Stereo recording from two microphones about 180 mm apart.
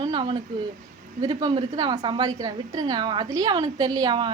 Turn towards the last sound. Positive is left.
turn(degrees=-25)  # may be behind; listen again after turning